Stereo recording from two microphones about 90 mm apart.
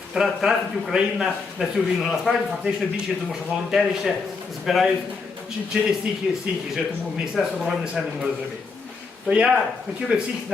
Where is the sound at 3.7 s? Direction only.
5° right (ahead or behind).